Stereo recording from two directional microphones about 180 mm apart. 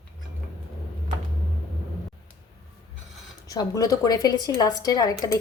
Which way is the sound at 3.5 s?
20° left (ahead or behind).